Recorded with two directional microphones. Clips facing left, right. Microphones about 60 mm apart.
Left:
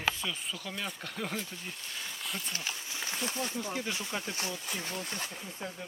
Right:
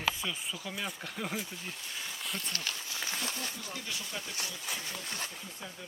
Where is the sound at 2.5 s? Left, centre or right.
Left.